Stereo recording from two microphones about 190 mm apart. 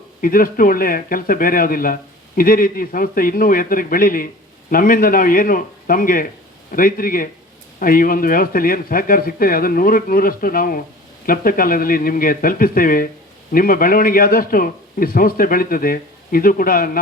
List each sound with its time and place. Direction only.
0.2 s a man's voice: 50° left (ahead or behind)